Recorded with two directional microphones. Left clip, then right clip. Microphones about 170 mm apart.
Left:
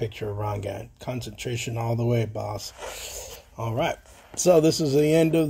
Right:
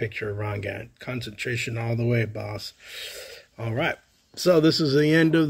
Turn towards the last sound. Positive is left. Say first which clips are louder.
# even
turn(degrees=-35)  # may be behind; listen again after turning